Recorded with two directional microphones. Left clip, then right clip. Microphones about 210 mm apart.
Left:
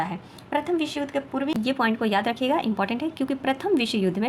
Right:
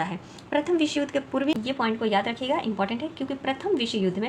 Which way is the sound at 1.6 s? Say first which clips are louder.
Left 2 dB; 30° left (ahead or behind).